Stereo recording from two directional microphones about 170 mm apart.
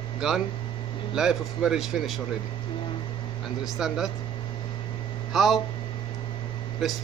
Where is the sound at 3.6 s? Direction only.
Centre (ahead or behind).